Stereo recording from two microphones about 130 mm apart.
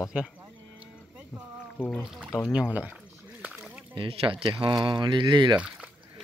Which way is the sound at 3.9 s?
40° right (ahead or behind).